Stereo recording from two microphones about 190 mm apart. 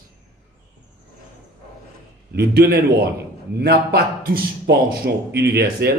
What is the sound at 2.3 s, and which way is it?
A man's voice, 55° right (ahead or behind).